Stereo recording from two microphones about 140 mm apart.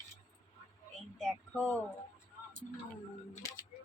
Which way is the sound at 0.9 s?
5° left (ahead or behind).